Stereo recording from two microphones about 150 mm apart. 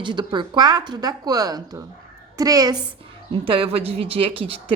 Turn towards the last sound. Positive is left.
turn(degrees=-35)  # may be behind; listen again after turning